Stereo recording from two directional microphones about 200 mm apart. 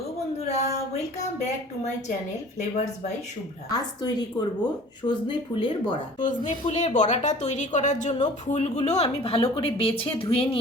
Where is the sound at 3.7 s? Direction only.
20° left (ahead or behind).